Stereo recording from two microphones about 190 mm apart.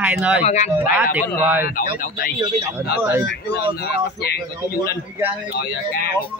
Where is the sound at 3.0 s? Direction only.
15° right (ahead or behind).